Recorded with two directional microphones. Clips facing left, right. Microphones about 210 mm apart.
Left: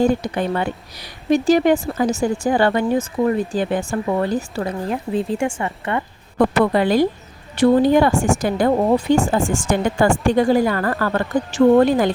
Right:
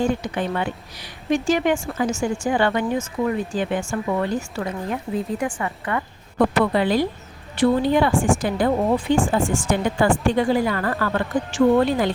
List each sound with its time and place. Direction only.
0.0 s speech: 40° left (ahead or behind)
6.7 s speech: 45° left (ahead or behind)